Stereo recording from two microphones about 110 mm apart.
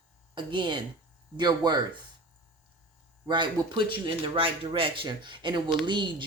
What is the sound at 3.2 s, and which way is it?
Speech, 45° right (ahead or behind).